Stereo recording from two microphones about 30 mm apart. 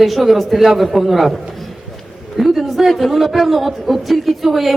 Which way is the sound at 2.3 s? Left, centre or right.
Centre.